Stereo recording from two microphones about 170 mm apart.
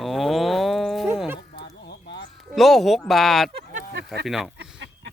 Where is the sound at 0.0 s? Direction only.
Centre (ahead or behind).